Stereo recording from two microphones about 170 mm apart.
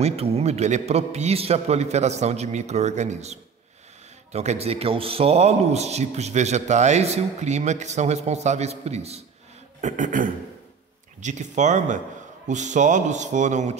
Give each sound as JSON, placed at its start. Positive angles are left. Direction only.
{"t": 0.0, "sound": "a man's voice", "side_deg": -35}